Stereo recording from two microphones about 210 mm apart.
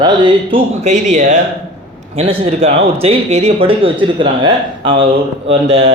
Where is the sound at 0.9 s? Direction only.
35° right (ahead or behind).